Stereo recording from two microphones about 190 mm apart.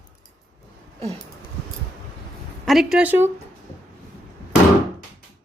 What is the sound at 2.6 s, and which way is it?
Speech, 5° right (ahead or behind).